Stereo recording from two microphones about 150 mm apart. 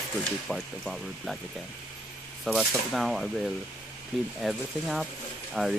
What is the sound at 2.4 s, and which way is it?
Speech, centre (ahead or behind).